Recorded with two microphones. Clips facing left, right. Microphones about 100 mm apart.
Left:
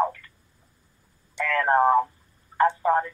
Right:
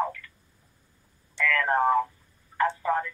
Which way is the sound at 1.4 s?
35° left (ahead or behind).